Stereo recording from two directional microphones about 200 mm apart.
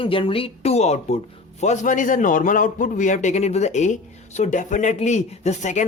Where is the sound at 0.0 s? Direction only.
25° left (ahead or behind).